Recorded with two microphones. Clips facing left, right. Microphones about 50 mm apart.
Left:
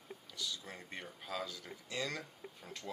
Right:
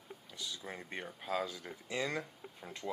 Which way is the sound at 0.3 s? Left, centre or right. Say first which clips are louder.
Right 1 dB; right.